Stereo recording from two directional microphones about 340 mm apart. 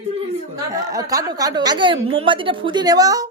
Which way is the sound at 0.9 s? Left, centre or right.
Centre.